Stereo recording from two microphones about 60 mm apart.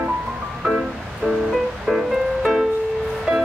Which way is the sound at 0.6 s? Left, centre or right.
Centre.